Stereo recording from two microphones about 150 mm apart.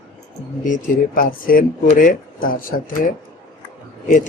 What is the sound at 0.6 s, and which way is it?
A man's voice, 65° left (ahead or behind).